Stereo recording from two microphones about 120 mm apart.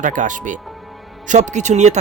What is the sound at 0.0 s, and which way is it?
A man's voice, 90° right.